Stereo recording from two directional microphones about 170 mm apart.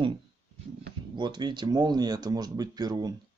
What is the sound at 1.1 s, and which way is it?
Speech, 25° right (ahead or behind).